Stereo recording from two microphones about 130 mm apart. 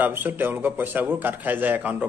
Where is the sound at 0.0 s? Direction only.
15° right (ahead or behind).